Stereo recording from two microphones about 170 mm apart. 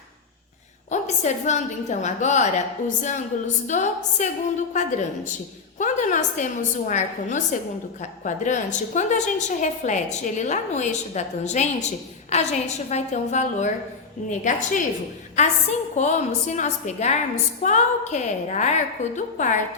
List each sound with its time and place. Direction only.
0.9 s a woman's voice: 45° left (ahead or behind)